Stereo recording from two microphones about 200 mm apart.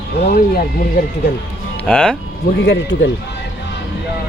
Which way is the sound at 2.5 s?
60° left (ahead or behind).